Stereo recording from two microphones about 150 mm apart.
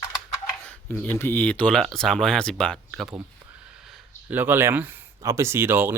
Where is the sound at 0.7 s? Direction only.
10° left (ahead or behind).